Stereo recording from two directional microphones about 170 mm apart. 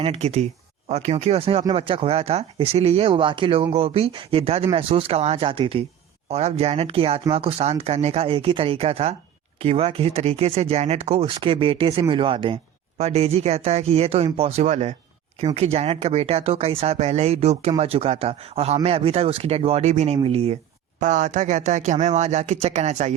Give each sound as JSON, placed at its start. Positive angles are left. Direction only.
{"t": 0.0, "sound": "speech", "side_deg": -35}
{"t": 21.0, "sound": "speech", "side_deg": -45}